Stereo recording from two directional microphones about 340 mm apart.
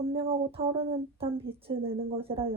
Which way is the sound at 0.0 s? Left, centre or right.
Centre.